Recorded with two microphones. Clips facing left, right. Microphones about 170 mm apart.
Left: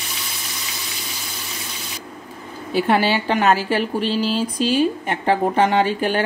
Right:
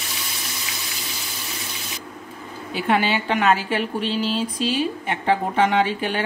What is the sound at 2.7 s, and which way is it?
A woman's voice, 35° left (ahead or behind).